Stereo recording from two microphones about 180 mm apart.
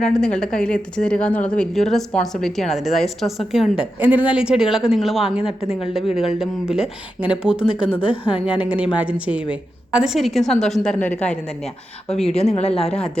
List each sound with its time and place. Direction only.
0.0 s speech: 5° left (ahead or behind)
12.0 s speech: 35° left (ahead or behind)